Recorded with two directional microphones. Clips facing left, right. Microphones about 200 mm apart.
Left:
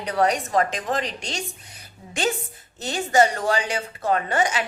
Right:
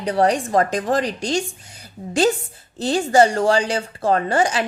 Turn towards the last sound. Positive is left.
turn(degrees=-30)  # may be behind; listen again after turning